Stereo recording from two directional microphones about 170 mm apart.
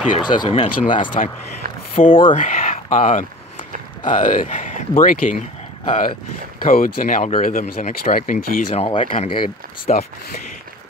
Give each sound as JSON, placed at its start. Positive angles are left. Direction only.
{"t": 0.2, "sound": "speech", "side_deg": 25}
{"t": 1.2, "sound": "speech", "side_deg": 45}
{"t": 1.6, "sound": "a sound", "side_deg": -60}
{"t": 2.0, "sound": "speech", "side_deg": 30}
{"t": 2.3, "sound": "speech", "side_deg": 50}
{"t": 8.6, "sound": "speech", "side_deg": 30}
{"t": 9.9, "sound": "speech", "side_deg": 60}